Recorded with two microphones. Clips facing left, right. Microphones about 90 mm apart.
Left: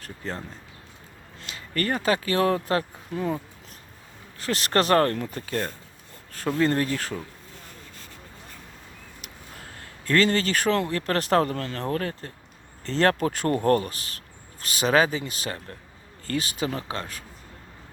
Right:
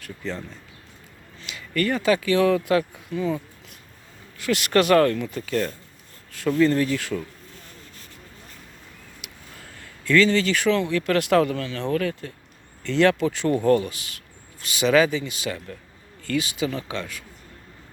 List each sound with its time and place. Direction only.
0.0 s speech: 40° left (ahead or behind)
1.5 s speech: 35° left (ahead or behind)
4.4 s speech: 35° left (ahead or behind)
10.0 s speech: 40° left (ahead or behind)